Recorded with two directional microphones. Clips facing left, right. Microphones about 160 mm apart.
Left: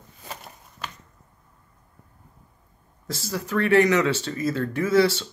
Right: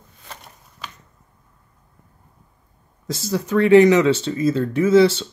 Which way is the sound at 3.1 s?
20° right (ahead or behind).